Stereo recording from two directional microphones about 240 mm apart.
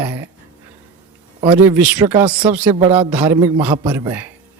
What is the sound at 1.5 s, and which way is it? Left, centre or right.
A man's voice, centre.